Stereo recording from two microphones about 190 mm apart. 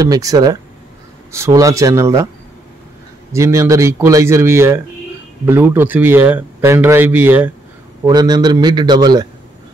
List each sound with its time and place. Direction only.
0.0 s a man's voice: 20° right (ahead or behind)
3.3 s speech: 15° right (ahead or behind)
8.0 s a man's voice: 20° right (ahead or behind)